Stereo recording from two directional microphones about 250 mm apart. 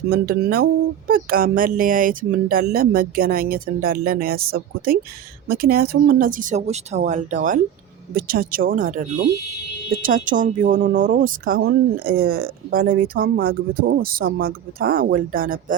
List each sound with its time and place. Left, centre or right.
0.1 s speech: right